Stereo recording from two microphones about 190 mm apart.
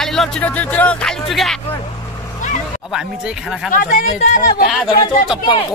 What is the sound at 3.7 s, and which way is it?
Speech, 45° left (ahead or behind).